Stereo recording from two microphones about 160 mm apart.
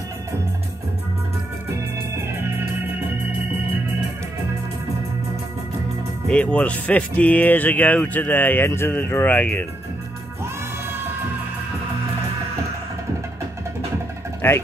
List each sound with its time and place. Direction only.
1.7 s organ: 15° right (ahead or behind)
6.2 s speech: 10° left (ahead or behind)
10.4 s music: 15° right (ahead or behind)
14.4 s speech: 15° left (ahead or behind)